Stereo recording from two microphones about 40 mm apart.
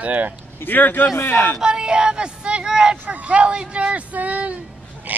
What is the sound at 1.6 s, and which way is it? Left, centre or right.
Speech, centre.